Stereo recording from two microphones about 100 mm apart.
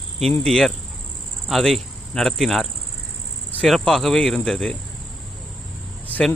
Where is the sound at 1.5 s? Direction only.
Centre (ahead or behind).